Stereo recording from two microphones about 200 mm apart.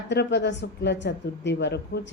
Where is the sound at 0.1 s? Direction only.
55° left (ahead or behind).